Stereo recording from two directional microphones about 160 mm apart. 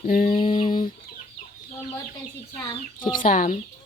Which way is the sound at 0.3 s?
30° left (ahead or behind).